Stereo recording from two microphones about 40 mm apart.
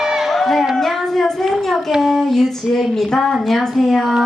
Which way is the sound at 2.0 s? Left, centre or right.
Centre.